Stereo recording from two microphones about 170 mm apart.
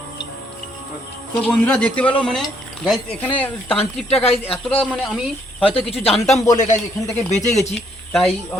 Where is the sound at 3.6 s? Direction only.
35° left (ahead or behind).